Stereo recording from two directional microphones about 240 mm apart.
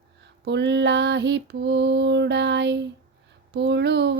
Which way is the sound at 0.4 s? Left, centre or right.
Right.